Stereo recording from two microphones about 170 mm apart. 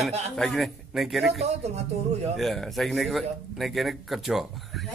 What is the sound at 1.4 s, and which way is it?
Speech, 40° right (ahead or behind).